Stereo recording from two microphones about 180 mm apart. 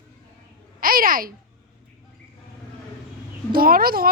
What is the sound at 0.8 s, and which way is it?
Speech, 50° right (ahead or behind).